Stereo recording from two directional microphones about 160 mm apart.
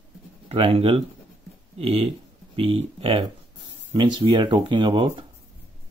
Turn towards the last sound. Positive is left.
turn(degrees=-30)  # may be behind; listen again after turning